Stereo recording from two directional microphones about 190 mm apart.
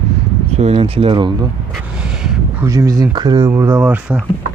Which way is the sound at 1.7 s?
5° right (ahead or behind).